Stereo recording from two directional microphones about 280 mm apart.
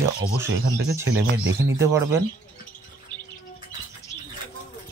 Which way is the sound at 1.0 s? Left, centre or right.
Right.